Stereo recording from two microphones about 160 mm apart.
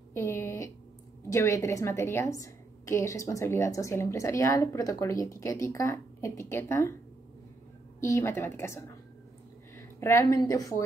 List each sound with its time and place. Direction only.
0.1 s a woman's voice: 15° left (ahead or behind)
8.0 s a woman's voice: 15° left (ahead or behind)